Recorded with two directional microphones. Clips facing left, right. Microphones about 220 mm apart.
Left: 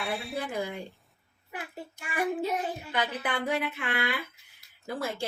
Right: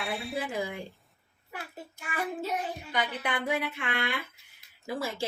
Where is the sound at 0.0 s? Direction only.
Centre (ahead or behind).